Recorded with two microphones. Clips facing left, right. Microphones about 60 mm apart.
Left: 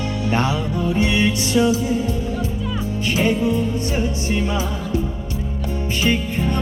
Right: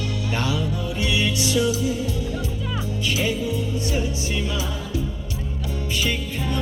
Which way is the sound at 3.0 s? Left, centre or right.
Left.